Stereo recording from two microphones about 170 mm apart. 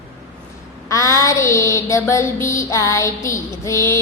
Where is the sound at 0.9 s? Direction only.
20° left (ahead or behind).